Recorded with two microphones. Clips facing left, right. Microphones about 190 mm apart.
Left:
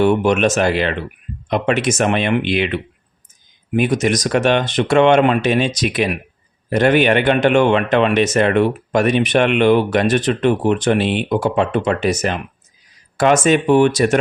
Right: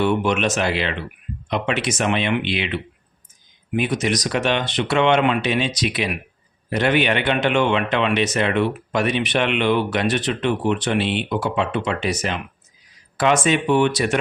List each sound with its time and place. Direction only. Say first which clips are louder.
0.0 s speech: left 5 dB; 45° left (ahead or behind)